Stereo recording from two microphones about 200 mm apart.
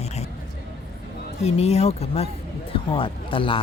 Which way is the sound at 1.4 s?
30° left (ahead or behind).